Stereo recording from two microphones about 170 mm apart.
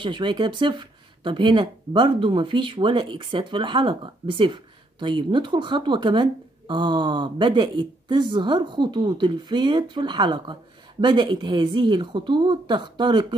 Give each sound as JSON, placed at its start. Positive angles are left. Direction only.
{"t": 0.0, "sound": "speech", "side_deg": -30}